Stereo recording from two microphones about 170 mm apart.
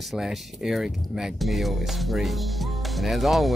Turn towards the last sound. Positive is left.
turn(degrees=0)  # may be behind; listen again after turning